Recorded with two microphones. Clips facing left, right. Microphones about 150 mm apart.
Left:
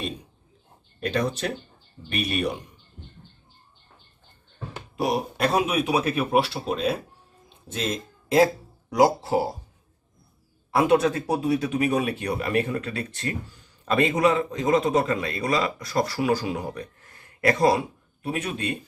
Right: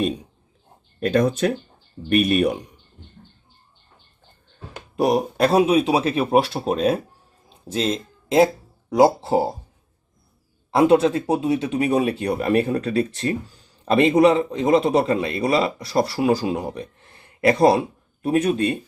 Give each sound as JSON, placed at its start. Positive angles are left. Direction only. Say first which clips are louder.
{"t": 0.9, "sound": "speech", "louder": "right 7 dB", "side_deg": -50}
{"t": 4.9, "sound": "speech", "louder": "right 6 dB", "side_deg": -40}
{"t": 7.5, "sound": "music", "louder": "right 6 dB", "side_deg": -30}
{"t": 9.0, "sound": "a man's voice", "louder": "right 4 dB", "side_deg": -25}
{"t": 10.8, "sound": "a man's voice", "louder": "right 4 dB", "side_deg": -30}